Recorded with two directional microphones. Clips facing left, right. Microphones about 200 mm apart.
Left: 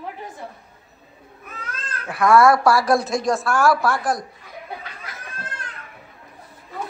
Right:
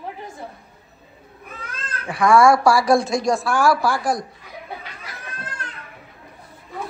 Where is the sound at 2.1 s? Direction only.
Centre (ahead or behind).